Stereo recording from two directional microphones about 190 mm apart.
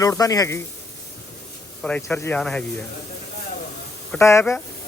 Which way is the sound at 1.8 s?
5° left (ahead or behind).